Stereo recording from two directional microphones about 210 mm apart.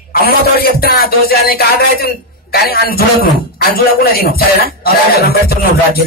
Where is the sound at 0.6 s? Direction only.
45° left (ahead or behind).